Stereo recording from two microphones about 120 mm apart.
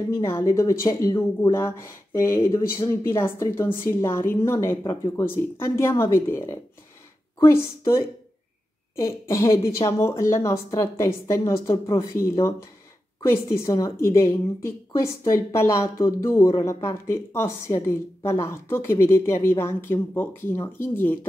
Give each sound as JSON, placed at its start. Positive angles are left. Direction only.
{"t": 0.1, "sound": "a woman's voice", "side_deg": 25}